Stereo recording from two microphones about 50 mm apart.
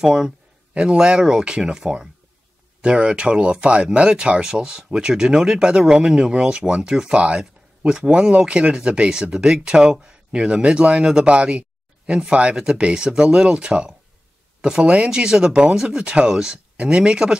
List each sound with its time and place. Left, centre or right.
0.0 s speech: centre